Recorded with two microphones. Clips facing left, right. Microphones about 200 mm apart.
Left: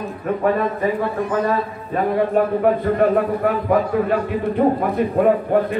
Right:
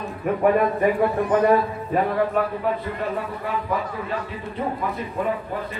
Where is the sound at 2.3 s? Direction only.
55° left (ahead or behind).